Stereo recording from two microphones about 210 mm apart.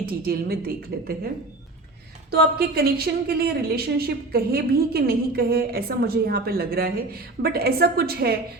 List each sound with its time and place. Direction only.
0.0 s a woman's voice: 45° right (ahead or behind)
2.3 s a woman's voice: 50° right (ahead or behind)